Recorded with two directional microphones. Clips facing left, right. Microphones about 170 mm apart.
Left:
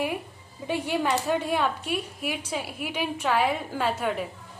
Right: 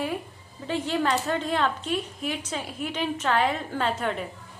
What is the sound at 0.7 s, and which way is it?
A woman's voice, 10° left (ahead or behind).